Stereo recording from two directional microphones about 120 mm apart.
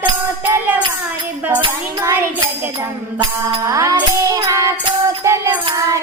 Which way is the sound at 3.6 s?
25° right (ahead or behind).